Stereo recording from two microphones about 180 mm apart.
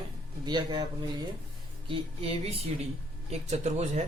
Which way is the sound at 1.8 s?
30° right (ahead or behind).